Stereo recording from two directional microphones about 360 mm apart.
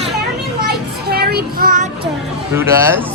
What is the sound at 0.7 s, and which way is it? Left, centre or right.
Child singing, right.